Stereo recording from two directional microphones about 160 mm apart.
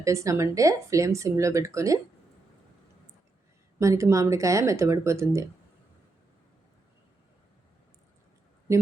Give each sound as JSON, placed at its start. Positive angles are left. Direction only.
{"t": 0.0, "sound": "speech", "side_deg": -20}
{"t": 3.8, "sound": "speech", "side_deg": -20}